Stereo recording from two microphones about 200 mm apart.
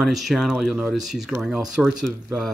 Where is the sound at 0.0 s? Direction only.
Centre (ahead or behind).